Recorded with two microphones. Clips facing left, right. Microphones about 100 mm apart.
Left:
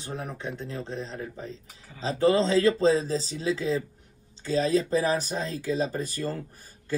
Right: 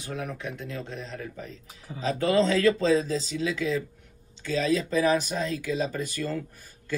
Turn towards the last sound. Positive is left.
turn(degrees=40)  # may be behind; listen again after turning